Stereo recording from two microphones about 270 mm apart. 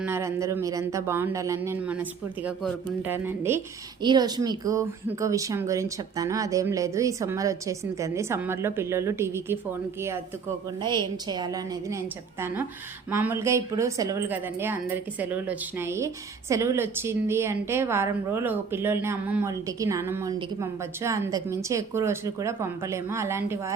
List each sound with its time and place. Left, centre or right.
0.0 s a woman's voice: centre
10.8 s a woman's voice: centre